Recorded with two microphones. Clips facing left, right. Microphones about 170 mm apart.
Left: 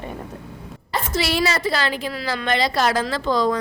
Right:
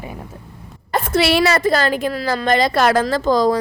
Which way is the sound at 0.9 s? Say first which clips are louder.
Right 6 dB; 55° right (ahead or behind).